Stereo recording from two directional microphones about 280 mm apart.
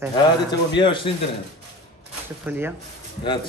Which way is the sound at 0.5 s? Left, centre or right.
Centre.